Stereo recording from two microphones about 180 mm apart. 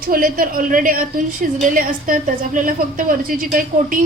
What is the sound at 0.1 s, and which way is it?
A woman's voice, 55° right (ahead or behind).